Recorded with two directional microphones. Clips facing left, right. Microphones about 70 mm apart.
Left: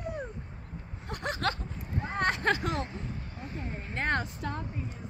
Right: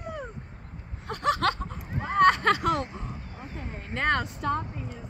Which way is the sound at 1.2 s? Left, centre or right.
Right.